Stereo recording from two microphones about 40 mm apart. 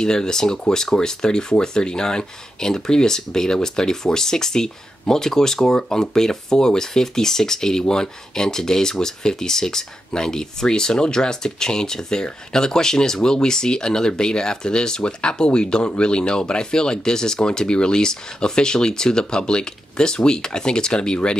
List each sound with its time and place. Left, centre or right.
0.0 s speech: centre